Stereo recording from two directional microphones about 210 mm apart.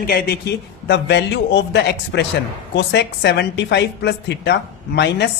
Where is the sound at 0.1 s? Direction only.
50° left (ahead or behind).